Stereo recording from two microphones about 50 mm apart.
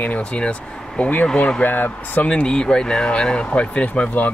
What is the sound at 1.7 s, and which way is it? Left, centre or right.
Speech, left.